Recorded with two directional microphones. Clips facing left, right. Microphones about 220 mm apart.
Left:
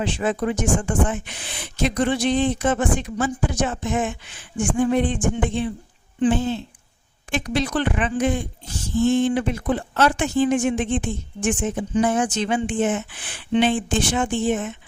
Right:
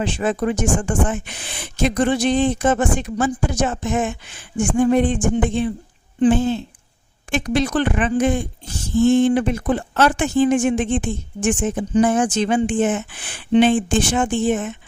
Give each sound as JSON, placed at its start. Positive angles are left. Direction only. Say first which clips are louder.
{"t": 0.0, "sound": "speech", "louder": "right 2 dB", "side_deg": -45}